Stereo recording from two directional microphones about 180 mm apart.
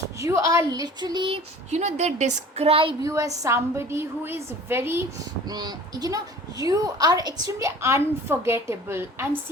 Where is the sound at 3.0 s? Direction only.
20° right (ahead or behind).